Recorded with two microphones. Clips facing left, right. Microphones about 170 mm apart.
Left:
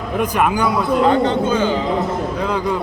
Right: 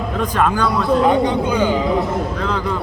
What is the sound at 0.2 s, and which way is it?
Speech, 10° left (ahead or behind).